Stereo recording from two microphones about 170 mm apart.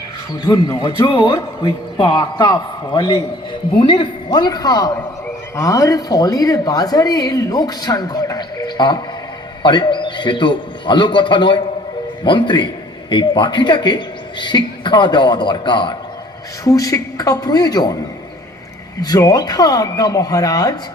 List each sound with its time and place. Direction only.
0.4 s speech: 20° left (ahead or behind)
19.0 s speech: 20° left (ahead or behind)